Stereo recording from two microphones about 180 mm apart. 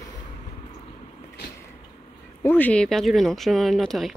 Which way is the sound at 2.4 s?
10° left (ahead or behind).